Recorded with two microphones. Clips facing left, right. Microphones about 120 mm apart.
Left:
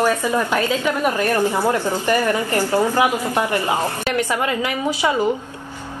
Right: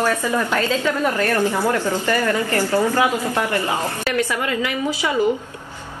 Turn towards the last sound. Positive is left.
turn(degrees=20)  # may be behind; listen again after turning